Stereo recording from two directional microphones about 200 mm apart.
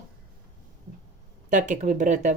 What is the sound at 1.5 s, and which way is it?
Speech, 40° right (ahead or behind).